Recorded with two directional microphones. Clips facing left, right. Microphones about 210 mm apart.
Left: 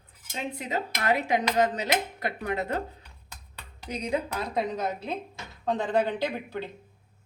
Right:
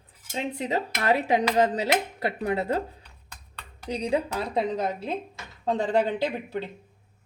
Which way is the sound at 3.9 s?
30° right (ahead or behind).